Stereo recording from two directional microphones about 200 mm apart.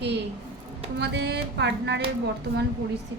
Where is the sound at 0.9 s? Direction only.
55° right (ahead or behind).